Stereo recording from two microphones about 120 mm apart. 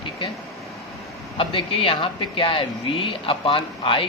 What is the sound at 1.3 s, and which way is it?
A woman's voice, 50° left (ahead or behind).